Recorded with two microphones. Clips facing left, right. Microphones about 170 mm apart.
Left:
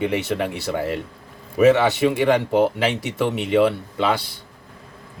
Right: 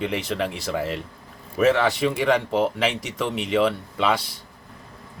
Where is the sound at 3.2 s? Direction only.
55° left (ahead or behind).